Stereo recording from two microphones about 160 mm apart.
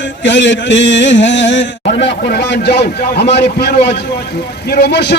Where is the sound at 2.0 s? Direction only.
90° left.